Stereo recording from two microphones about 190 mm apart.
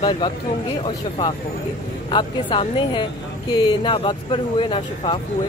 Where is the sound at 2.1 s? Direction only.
25° left (ahead or behind).